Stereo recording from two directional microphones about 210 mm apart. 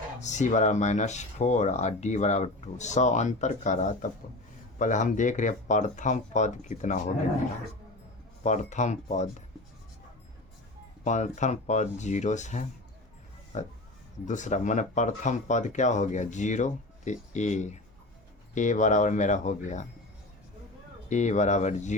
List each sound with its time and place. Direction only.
0.2 s speech: 35° left (ahead or behind)
8.4 s speech: 35° left (ahead or behind)
11.0 s speech: 35° left (ahead or behind)
21.1 s speech: 35° left (ahead or behind)